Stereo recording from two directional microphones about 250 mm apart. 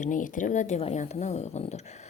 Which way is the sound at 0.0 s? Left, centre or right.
Left.